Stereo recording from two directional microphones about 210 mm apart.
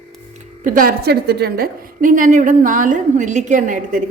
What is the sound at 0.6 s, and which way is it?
A woman's voice, 40° right (ahead or behind).